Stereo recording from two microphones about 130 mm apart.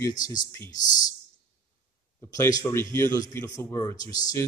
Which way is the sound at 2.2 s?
25° left (ahead or behind).